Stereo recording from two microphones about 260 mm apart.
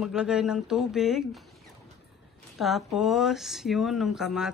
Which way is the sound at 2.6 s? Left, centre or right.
Centre.